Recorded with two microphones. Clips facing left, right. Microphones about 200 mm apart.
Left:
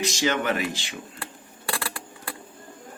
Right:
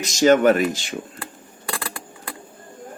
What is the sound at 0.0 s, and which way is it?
Speech, 45° right (ahead or behind).